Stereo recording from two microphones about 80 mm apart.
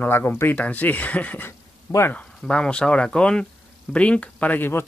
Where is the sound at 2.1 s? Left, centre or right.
Centre.